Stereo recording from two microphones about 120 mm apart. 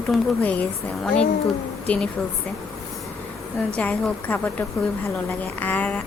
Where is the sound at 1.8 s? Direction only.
10° left (ahead or behind).